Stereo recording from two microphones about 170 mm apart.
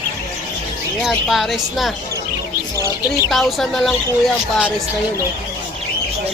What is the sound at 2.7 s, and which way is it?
Speech, 20° left (ahead or behind).